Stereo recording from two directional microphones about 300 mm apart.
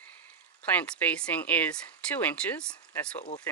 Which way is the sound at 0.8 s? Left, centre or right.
Centre.